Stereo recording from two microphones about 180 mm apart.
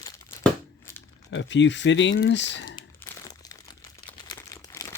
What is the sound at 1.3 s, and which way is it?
Speech, 90° left.